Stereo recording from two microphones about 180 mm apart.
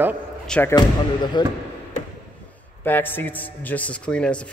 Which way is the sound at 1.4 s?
25° left (ahead or behind).